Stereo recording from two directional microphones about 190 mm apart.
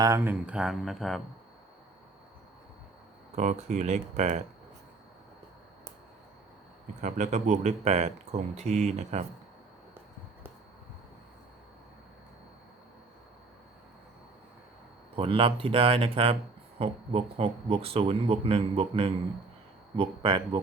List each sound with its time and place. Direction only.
0.0 s speech: 15° right (ahead or behind)
3.3 s speech: 40° right (ahead or behind)
7.0 s speech: 40° right (ahead or behind)
15.1 s speech: 30° right (ahead or behind)